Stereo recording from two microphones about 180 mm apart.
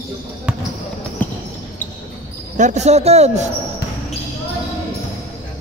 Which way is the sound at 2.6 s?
40° right (ahead or behind).